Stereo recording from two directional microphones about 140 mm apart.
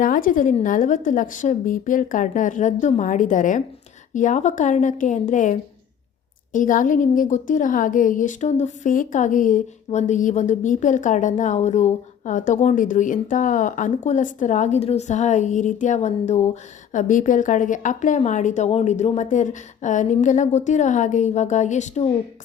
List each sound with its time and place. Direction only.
0.0 s a woman's voice: 75° left (ahead or behind); by 22.0 s 60° left (ahead or behind)